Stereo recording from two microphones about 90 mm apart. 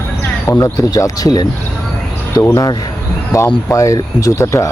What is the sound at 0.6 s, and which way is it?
Speech, 40° left (ahead or behind).